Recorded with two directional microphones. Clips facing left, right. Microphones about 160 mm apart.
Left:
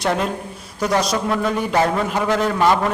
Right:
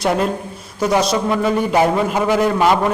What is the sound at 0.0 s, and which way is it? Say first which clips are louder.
A man's voice: right 3 dB; centre (ahead or behind).